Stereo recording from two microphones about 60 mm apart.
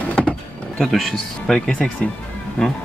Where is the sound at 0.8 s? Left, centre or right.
Centre.